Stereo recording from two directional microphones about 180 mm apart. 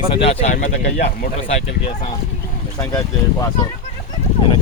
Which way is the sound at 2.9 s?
20° left (ahead or behind).